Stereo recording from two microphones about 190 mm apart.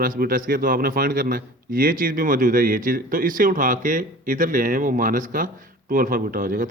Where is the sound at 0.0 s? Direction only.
50° right (ahead or behind).